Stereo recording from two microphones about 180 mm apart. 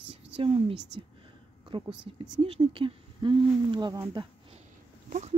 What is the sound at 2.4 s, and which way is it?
Speech, 30° right (ahead or behind).